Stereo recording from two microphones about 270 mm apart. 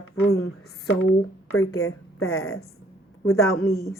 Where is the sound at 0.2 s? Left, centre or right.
Left.